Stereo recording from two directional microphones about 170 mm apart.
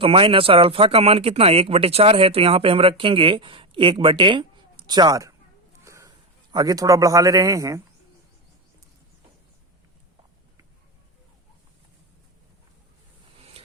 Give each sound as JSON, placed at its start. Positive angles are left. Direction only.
{"t": 0.0, "sound": "speech", "side_deg": -30}
{"t": 5.8, "sound": "a sound", "side_deg": -15}
{"t": 6.5, "sound": "a man's voice", "side_deg": -25}